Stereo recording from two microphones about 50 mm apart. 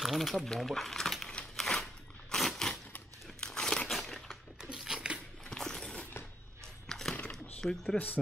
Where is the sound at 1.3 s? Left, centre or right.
Centre.